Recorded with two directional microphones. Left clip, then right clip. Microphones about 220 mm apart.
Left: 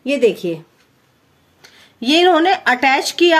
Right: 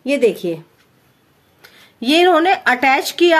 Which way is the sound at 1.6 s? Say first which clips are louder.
Even; 5° right (ahead or behind).